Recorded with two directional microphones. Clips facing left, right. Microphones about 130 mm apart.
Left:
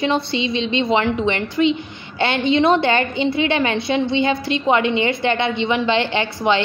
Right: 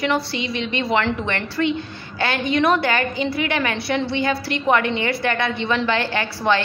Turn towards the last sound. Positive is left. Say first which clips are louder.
# left 2 dB
turn(degrees=20)  # may be behind; listen again after turning